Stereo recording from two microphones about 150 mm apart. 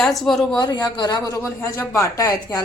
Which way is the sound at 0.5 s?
30° left (ahead or behind).